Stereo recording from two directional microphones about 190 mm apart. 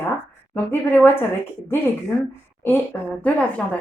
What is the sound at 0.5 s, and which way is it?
Speech, 10° left (ahead or behind).